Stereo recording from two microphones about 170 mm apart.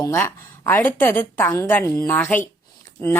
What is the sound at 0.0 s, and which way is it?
A woman's voice, 15° left (ahead or behind).